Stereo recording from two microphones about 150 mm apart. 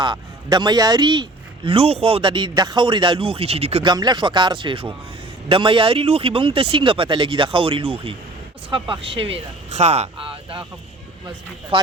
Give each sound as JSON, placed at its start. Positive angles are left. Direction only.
{"t": 0.0, "sound": "a man's voice", "side_deg": -30}
{"t": 3.8, "sound": "a man's voice", "side_deg": -30}